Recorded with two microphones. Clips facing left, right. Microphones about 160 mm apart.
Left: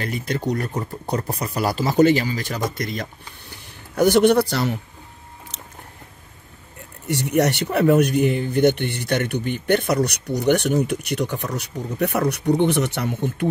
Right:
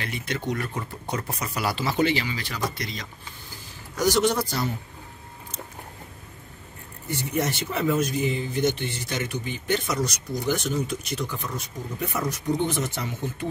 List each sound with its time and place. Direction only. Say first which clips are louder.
0.0 s speech: left 6 dB; 40° left (ahead or behind); by 4.7 s 70° left (ahead or behind)
7.1 s speech: left 7 dB; 70° left (ahead or behind)